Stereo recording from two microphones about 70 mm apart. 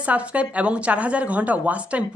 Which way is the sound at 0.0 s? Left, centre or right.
Centre.